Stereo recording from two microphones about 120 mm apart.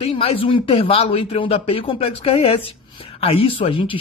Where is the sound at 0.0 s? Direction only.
55° left (ahead or behind).